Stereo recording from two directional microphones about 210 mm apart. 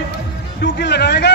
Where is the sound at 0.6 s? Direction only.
50° left (ahead or behind).